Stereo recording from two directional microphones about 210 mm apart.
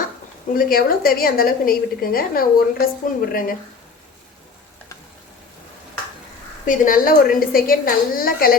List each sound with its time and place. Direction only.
0.5 s a woman's voice: 45° left (ahead or behind)
6.7 s a woman's voice: 40° left (ahead or behind)